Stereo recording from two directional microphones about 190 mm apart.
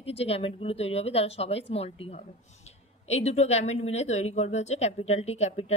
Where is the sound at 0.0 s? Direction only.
30° left (ahead or behind).